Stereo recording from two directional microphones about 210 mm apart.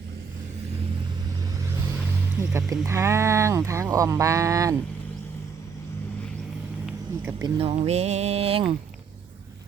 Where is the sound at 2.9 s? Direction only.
15° right (ahead or behind).